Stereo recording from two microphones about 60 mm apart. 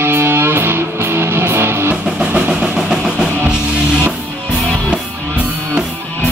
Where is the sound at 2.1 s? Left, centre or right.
Centre.